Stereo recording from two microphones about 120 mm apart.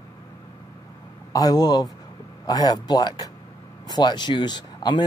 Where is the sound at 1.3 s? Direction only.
30° left (ahead or behind).